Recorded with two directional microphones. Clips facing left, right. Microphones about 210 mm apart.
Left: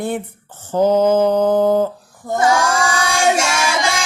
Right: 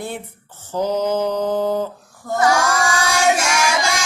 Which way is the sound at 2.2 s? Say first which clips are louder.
Left 1 dB; 25° left (ahead or behind).